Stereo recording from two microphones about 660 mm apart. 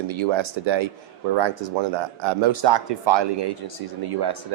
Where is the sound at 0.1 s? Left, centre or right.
Right.